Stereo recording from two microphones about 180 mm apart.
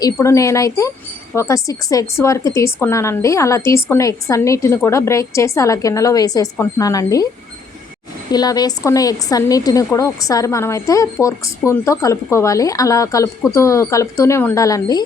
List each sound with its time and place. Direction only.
0.0 s a woman's voice: 15° left (ahead or behind)
8.3 s a woman's voice: 20° left (ahead or behind)